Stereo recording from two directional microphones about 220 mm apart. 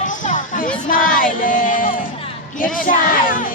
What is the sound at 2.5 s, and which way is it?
Speech, 40° left (ahead or behind).